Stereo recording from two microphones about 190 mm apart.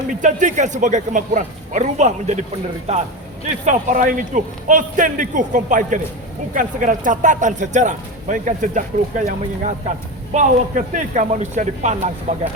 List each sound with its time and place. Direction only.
0.1 s speech: 40° right (ahead or behind)
3.7 s a man's voice: 45° right (ahead or behind)